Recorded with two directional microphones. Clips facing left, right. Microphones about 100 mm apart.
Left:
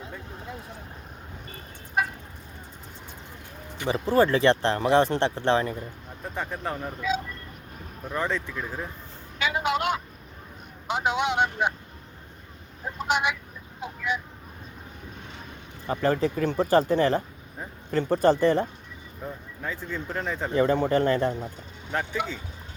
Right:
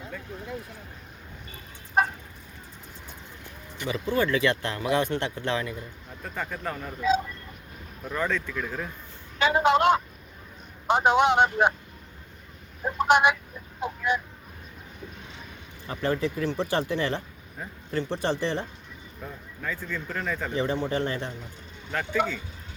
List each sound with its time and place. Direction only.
2.0 s fowl: 40° right (ahead or behind)
3.8 s speech: 35° left (ahead or behind)
8.1 s speech: 25° left (ahead or behind)
9.4 s a man's voice: 40° right (ahead or behind)
12.8 s speech: 60° right (ahead or behind)
15.9 s a man's voice: 40° left (ahead or behind)
19.6 s speech: 25° left (ahead or behind)
20.5 s a man's voice: 50° left (ahead or behind)